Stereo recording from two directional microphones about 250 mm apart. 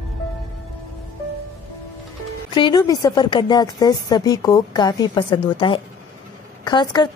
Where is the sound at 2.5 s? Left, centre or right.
Centre.